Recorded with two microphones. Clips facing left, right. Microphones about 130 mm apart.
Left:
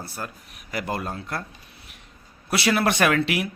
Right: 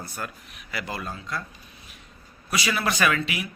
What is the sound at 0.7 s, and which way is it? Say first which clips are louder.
Speech: left 4 dB; 50° left (ahead or behind).